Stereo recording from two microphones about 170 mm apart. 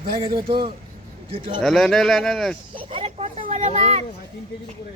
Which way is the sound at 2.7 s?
35° right (ahead or behind).